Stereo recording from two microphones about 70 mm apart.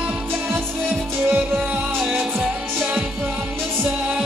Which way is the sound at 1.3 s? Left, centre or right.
Right.